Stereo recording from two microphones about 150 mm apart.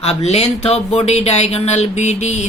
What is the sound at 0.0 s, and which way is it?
A woman's voice, 45° left (ahead or behind).